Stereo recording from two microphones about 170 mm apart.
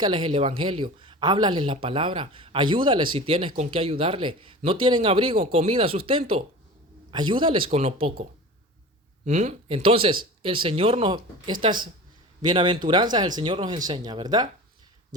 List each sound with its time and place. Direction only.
0.0 s speech: 30° right (ahead or behind)